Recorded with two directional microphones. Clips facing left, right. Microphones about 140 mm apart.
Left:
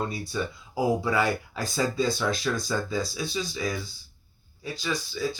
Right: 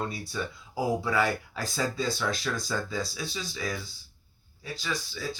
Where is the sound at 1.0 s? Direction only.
15° left (ahead or behind).